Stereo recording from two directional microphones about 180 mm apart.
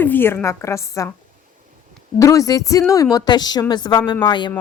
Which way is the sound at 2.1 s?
20° left (ahead or behind).